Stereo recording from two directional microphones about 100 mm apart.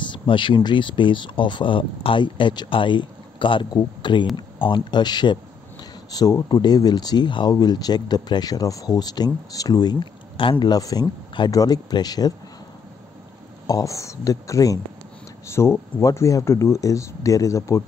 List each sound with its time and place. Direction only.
0.1 s speech: 55° left (ahead or behind)
13.7 s speech: 35° left (ahead or behind)